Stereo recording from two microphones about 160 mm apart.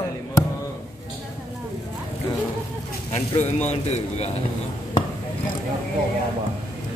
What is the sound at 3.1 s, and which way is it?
Speech, 40° left (ahead or behind).